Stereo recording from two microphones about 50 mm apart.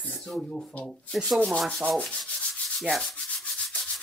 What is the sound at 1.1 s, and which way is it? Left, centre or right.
Rub, centre.